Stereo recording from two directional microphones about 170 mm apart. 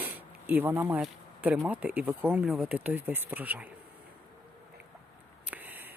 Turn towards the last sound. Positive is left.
turn(degrees=-10)  # may be behind; listen again after turning